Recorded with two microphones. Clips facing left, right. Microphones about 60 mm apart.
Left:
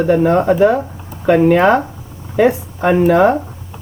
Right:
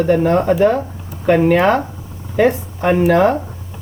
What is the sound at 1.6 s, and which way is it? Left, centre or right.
Speech, centre.